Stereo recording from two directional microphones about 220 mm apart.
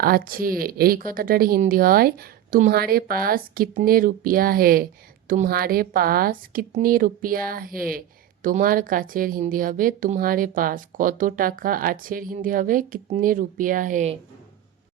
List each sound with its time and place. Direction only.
0.0 s a woman's voice: 40° right (ahead or behind)